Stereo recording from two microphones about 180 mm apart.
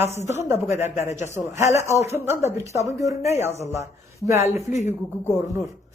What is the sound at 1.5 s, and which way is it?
Speech, 15° right (ahead or behind).